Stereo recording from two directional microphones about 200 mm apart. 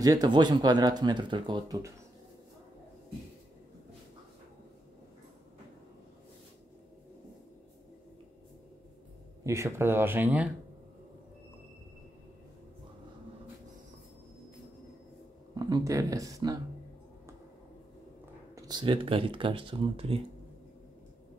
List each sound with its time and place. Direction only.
0.0 s speech: 20° right (ahead or behind)
9.4 s speech: 15° right (ahead or behind)
15.5 s speech: 20° right (ahead or behind)
18.5 s speech: 20° right (ahead or behind)